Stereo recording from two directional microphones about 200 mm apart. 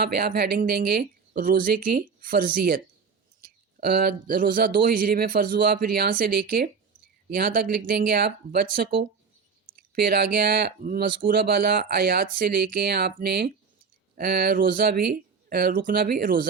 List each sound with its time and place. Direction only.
0.0 s speech: 50° right (ahead or behind)